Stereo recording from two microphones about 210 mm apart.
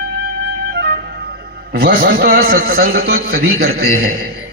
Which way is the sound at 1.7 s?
50° right (ahead or behind).